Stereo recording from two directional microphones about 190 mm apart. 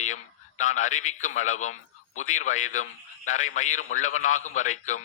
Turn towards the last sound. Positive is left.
turn(degrees=40)  # may be behind; listen again after turning